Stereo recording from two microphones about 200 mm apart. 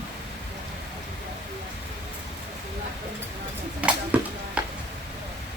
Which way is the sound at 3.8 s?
5° right (ahead or behind).